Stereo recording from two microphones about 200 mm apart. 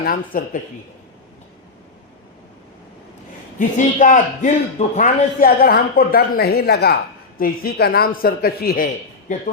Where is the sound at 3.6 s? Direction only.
40° left (ahead or behind).